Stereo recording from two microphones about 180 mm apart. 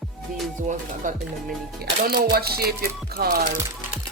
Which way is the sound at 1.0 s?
45° right (ahead or behind).